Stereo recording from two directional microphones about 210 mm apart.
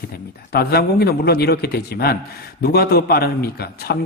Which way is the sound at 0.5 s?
50° left (ahead or behind).